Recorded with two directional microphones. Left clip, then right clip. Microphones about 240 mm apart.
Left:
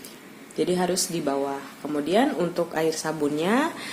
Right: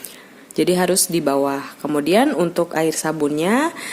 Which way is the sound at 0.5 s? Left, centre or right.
Right.